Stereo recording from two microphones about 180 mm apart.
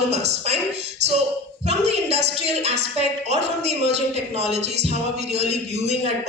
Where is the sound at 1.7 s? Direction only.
35° right (ahead or behind).